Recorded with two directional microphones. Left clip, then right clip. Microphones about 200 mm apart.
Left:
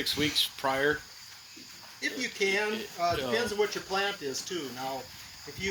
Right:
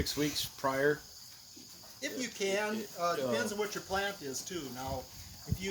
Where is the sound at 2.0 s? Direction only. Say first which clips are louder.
Left 6 dB; 50° right (ahead or behind).